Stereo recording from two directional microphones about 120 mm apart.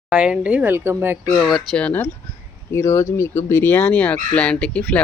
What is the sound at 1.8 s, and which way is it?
Speech, 10° left (ahead or behind).